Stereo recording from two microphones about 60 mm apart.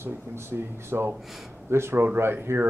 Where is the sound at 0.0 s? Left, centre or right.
Right.